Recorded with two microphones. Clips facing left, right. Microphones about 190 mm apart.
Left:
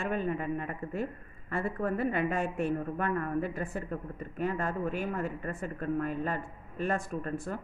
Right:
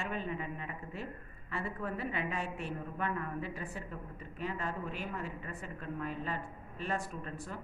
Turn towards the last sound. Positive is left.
turn(degrees=50)  # may be behind; listen again after turning